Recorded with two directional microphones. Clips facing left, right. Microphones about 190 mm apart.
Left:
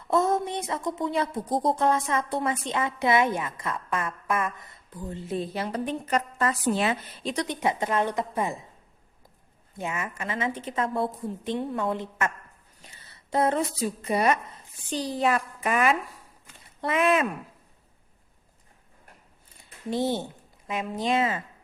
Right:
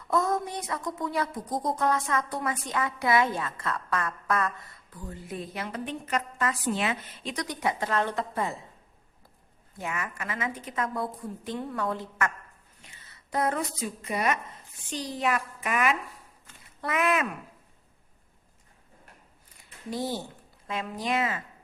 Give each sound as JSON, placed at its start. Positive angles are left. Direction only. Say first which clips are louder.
{"t": 0.1, "sound": "speech", "louder": "left 3 dB", "side_deg": 25}
{"t": 7.4, "sound": "a woman's voice", "louder": "left 1 dB", "side_deg": 25}
{"t": 9.7, "sound": "speech", "louder": "left 2 dB", "side_deg": 25}
{"t": 12.8, "sound": "a woman's voice", "louder": "left 3 dB", "side_deg": 30}
{"t": 19.9, "sound": "speech", "louder": "left 5 dB", "side_deg": 25}